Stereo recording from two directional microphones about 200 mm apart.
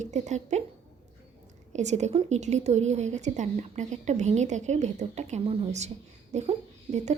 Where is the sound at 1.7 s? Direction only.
35° right (ahead or behind).